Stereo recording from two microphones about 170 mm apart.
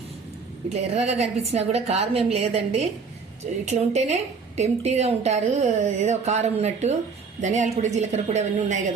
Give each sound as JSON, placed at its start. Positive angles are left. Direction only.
{"t": 0.7, "sound": "a woman's voice", "side_deg": -40}